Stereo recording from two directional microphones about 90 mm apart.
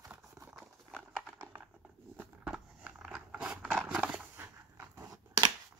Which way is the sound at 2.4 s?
10° right (ahead or behind).